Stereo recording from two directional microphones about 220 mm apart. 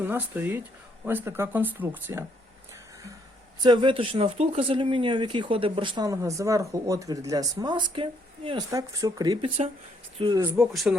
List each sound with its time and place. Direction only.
0.0 s speech: 10° right (ahead or behind)
3.6 s speech: 20° right (ahead or behind)
10.6 s a man's voice: centre (ahead or behind)